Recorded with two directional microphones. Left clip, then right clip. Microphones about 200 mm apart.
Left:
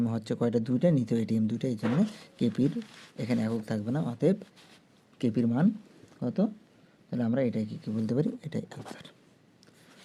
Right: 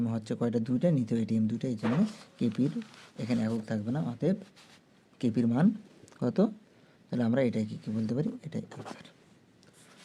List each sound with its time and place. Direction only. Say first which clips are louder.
0.0 s speech: left 3 dB; 20° left (ahead or behind)
5.1 s speech: left 1 dB; 15° left (ahead or behind)
6.1 s speech: right 2 dB; 15° right (ahead or behind)
7.1 s speech: right 1 dB; centre (ahead or behind); by 8.8 s 25° left (ahead or behind)